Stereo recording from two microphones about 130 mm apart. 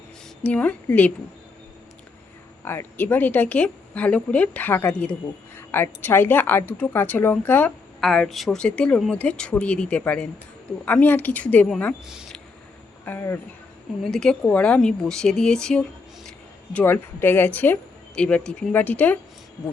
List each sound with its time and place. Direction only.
0.4 s speech: 10° left (ahead or behind)
2.6 s speech: 15° left (ahead or behind)
8.0 s speech: centre (ahead or behind)
12.0 s speech: 5° right (ahead or behind)
13.1 s speech: 15° left (ahead or behind)
14.0 s speech: 5° left (ahead or behind)
16.7 s speech: 15° left (ahead or behind)